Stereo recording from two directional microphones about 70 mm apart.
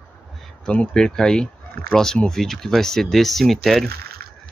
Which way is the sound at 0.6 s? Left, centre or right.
Centre.